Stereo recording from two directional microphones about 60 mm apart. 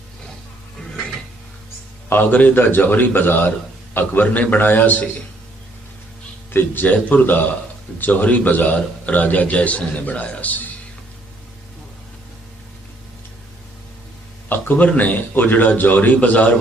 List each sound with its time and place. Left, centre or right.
2.0 s a man's voice: left
6.5 s a man's voice: left
14.5 s a man's voice: left